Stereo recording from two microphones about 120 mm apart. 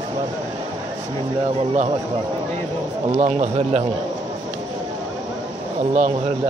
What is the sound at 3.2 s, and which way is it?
Speech, 60° right (ahead or behind).